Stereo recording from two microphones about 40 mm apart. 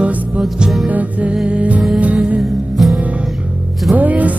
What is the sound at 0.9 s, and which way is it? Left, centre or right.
Music, right.